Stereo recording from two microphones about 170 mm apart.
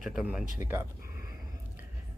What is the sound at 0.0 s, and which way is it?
Speech, 5° right (ahead or behind).